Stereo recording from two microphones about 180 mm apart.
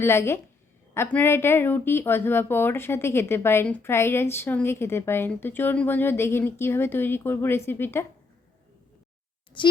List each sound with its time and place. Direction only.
0.0 s speech: 15° left (ahead or behind)
9.6 s a child's voice: 25° left (ahead or behind)